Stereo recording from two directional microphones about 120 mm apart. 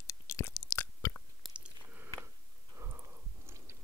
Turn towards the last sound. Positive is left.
turn(degrees=-20)  # may be behind; listen again after turning